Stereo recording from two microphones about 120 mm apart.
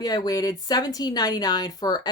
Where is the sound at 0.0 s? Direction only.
30° left (ahead or behind).